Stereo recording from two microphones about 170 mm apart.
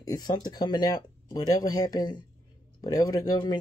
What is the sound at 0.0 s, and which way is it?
Speech, 20° left (ahead or behind).